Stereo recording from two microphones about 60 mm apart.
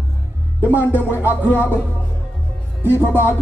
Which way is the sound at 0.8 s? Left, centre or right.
Left.